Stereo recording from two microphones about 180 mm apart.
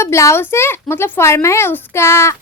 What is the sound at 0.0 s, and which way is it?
Speech, 15° left (ahead or behind).